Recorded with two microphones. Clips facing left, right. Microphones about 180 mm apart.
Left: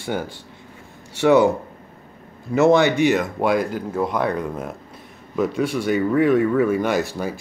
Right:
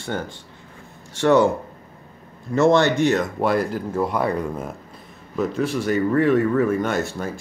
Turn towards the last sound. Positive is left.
turn(degrees=5)  # may be behind; listen again after turning